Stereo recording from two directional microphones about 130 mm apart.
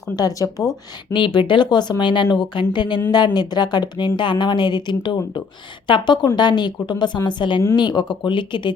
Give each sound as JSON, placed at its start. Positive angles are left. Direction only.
{"t": 0.2, "sound": "speech", "side_deg": 25}
{"t": 1.1, "sound": "speech", "side_deg": 40}